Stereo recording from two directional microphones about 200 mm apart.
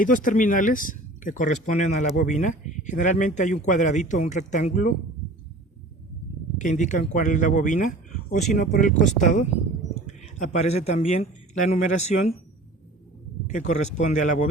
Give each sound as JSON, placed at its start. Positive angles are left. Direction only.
{"t": 0.0, "sound": "speech", "side_deg": 40}
{"t": 6.6, "sound": "a man's voice", "side_deg": 40}
{"t": 13.6, "sound": "speech", "side_deg": 35}